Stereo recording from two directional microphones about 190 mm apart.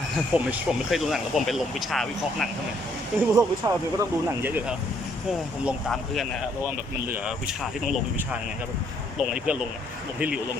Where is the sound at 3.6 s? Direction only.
15° right (ahead or behind).